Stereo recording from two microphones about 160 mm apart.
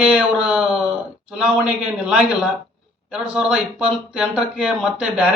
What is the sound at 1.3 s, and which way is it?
Speech, 5° right (ahead or behind).